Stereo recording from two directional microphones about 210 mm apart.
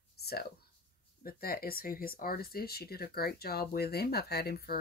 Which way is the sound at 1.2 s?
45° left (ahead or behind).